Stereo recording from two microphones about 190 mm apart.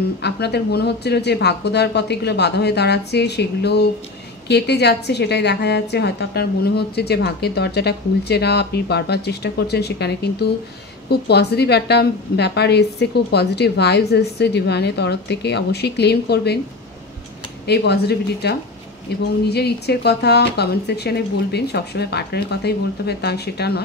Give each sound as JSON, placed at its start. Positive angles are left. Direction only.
{"t": 0.2, "sound": "a woman's voice", "side_deg": 60}
{"t": 17.6, "sound": "a woman's voice", "side_deg": 60}